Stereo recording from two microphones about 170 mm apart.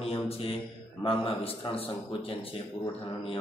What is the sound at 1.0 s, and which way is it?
A man's voice, 35° left (ahead or behind).